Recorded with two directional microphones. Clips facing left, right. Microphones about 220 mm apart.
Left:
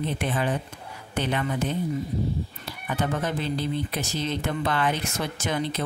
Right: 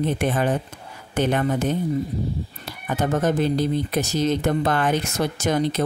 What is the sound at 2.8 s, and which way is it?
Speech, 45° right (ahead or behind).